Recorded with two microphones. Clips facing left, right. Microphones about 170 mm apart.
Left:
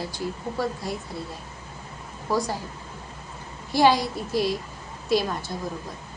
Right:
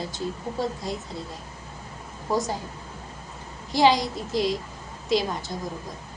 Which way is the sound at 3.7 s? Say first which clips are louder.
Even; 20° right (ahead or behind).